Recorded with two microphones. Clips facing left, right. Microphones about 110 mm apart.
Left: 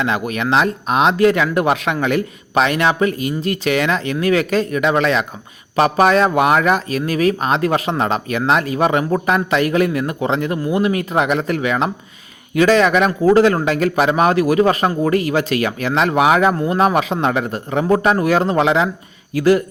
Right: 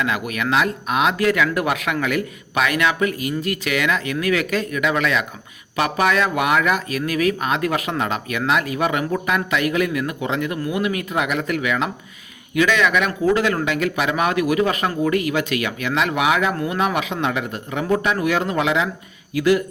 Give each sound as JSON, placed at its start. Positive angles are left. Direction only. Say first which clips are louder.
{"t": 0.0, "sound": "speech", "louder": "left 3 dB", "side_deg": 30}